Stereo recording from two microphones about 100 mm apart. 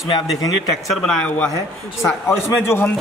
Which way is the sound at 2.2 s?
25° left (ahead or behind).